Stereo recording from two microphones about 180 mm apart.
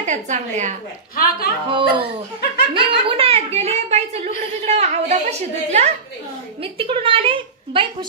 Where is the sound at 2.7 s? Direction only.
30° right (ahead or behind).